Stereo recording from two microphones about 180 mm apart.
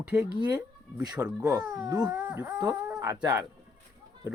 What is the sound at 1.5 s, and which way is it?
Speech, 20° right (ahead or behind).